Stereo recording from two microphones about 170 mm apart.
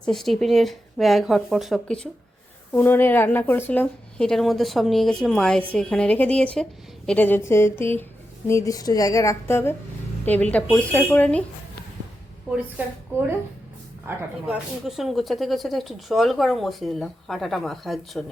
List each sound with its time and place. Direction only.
0.0 s a woman's voice: centre (ahead or behind)
14.1 s speech: 10° right (ahead or behind)